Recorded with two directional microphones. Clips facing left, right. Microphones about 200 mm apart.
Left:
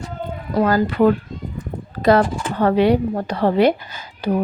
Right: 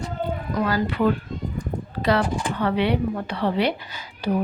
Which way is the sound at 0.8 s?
45° left (ahead or behind).